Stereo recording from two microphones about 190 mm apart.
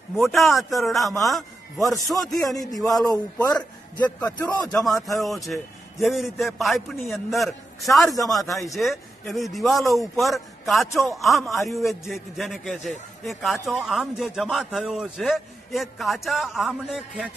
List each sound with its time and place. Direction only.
0.1 s a man's voice: centre (ahead or behind)
3.1 s a man's voice: 20° left (ahead or behind)
4.6 s a man's voice: centre (ahead or behind)